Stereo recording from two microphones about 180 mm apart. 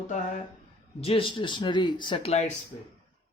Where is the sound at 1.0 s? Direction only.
30° left (ahead or behind).